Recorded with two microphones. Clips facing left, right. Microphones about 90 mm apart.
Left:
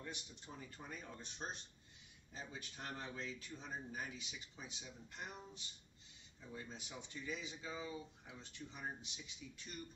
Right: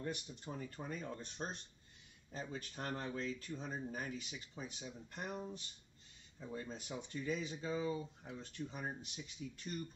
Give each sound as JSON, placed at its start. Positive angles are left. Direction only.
{"t": 0.0, "sound": "speech", "side_deg": -45}
{"t": 6.5, "sound": "speech", "side_deg": -45}